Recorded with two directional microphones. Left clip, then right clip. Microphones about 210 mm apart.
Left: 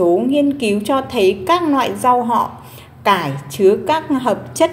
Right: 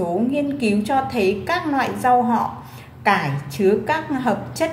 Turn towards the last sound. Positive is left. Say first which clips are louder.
# left 5 dB
turn(degrees=25)  # may be behind; listen again after turning